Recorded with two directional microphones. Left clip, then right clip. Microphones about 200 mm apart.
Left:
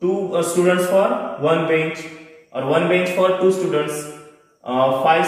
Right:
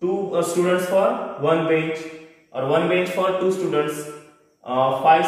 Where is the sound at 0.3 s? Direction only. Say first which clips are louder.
Left 2 dB; 15° right (ahead or behind).